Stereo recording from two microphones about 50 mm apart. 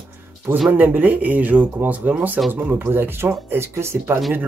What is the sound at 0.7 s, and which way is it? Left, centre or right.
Speech, right.